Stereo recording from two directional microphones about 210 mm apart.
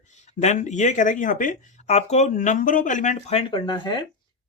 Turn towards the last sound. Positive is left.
turn(degrees=20)  # may be behind; listen again after turning